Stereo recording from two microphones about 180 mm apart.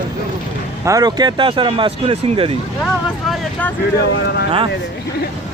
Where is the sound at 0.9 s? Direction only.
20° right (ahead or behind).